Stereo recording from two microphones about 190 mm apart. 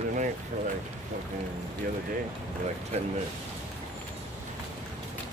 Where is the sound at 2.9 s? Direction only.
35° right (ahead or behind).